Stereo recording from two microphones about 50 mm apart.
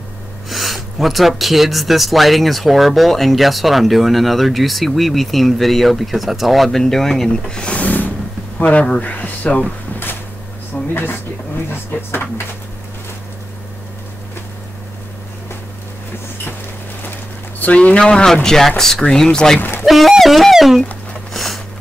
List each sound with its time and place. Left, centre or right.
0.5 s speech: centre; by 8.1 s left
8.6 s speech: centre
9.0 s speech: left
10.7 s a sound: centre
11.7 s speech: left
17.6 s speech: left
17.9 s speech: centre
19.8 s speech: centre
21.3 s a sound: centre